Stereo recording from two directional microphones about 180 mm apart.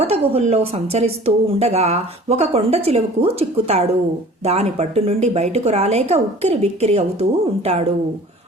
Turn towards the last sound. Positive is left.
turn(degrees=-35)  # may be behind; listen again after turning